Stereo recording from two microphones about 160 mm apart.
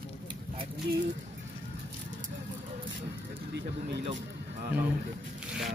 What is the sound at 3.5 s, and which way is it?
Speech, 90° right.